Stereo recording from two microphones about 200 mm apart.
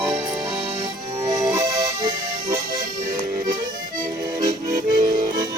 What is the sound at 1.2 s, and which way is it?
Accordion, 15° right (ahead or behind).